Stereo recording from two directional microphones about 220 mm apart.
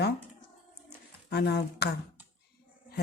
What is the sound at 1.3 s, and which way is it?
Speech, 50° left (ahead or behind).